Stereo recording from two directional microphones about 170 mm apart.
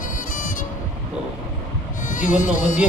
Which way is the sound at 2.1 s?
50° left (ahead or behind).